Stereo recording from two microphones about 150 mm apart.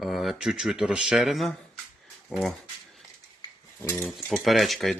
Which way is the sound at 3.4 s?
15° left (ahead or behind).